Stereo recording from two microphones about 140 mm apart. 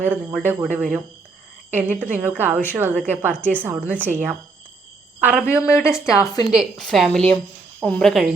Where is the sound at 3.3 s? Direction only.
10° left (ahead or behind).